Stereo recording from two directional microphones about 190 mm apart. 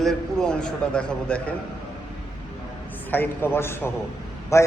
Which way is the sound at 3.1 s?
10° left (ahead or behind).